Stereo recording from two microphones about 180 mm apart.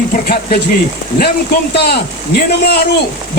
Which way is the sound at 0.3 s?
55° left (ahead or behind).